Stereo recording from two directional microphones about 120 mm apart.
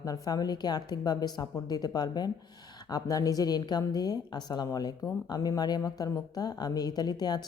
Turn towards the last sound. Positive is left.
turn(degrees=35)  # may be behind; listen again after turning